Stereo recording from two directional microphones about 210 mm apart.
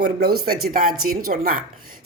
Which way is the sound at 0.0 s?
45° right (ahead or behind).